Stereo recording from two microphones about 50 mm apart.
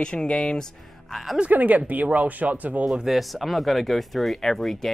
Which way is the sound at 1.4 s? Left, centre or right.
Right.